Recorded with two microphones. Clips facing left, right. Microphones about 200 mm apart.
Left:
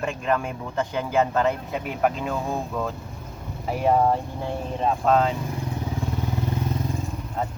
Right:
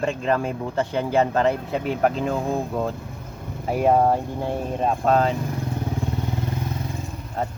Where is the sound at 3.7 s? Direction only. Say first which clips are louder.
Right 2 dB; 45° right (ahead or behind).